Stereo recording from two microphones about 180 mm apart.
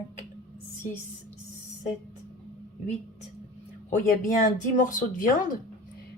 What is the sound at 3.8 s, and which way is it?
Speech, 45° left (ahead or behind).